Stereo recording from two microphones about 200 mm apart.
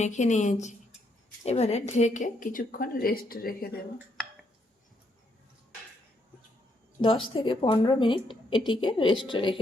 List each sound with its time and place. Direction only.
0.0 s a woman's voice: 35° left (ahead or behind)
7.0 s a woman's voice: 25° left (ahead or behind)